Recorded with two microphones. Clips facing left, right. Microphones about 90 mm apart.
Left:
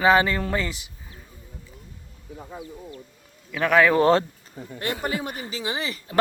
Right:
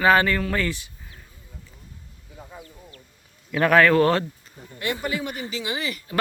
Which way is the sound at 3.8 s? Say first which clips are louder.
Left 3 dB; 20° left (ahead or behind).